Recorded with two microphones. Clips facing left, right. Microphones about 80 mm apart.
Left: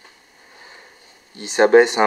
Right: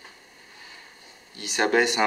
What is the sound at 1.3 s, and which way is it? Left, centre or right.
Speech, left.